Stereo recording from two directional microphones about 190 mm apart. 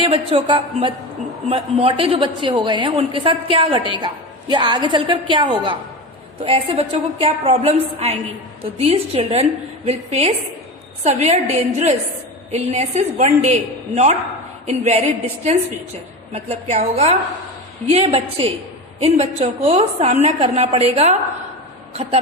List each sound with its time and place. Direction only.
0.0 s a woman's voice: 30° right (ahead or behind)